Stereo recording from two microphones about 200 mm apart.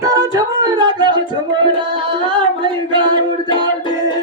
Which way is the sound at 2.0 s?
25° right (ahead or behind).